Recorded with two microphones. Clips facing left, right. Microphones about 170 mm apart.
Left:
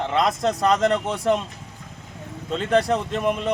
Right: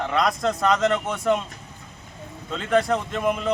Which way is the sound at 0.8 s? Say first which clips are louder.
Left 1 dB; 40° left (ahead or behind).